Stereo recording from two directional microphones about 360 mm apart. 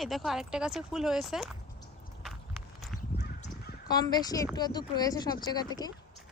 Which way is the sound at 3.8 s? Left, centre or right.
Centre.